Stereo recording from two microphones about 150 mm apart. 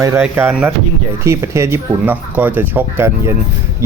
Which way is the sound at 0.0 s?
15° right (ahead or behind).